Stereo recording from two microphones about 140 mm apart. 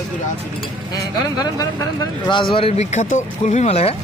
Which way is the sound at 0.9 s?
25° left (ahead or behind).